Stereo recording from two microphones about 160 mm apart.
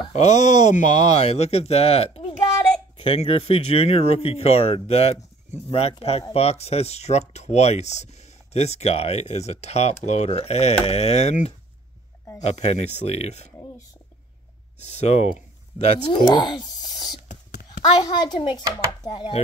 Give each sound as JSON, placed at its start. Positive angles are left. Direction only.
{"t": 0.1, "sound": "speech", "side_deg": 45}
{"t": 14.8, "sound": "speech", "side_deg": 45}
{"t": 16.1, "sound": "speech", "side_deg": 25}
{"t": 16.8, "sound": "a sound", "side_deg": 25}
{"t": 17.3, "sound": "whispering", "side_deg": 65}
{"t": 18.0, "sound": "speech", "side_deg": 30}